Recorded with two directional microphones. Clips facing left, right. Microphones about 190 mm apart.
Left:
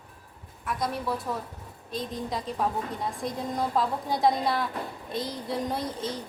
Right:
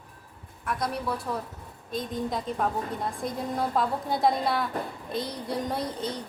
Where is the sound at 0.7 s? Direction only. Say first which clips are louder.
Even; centre (ahead or behind).